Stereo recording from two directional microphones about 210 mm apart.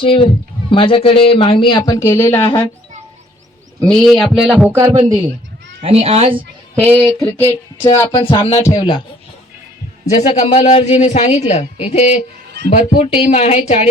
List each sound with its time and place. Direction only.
0.0 s a man's voice: 25° left (ahead or behind)
2.4 s a man's voice: 25° left (ahead or behind)
3.8 s a man's voice: 5° left (ahead or behind); by 5.2 s 20° right (ahead or behind)
5.8 s speech: 30° right (ahead or behind)
7.0 s a sound: 5° left (ahead or behind)
7.9 s a man's voice: 20° left (ahead or behind)
10.2 s a man's voice: 25° left (ahead or behind)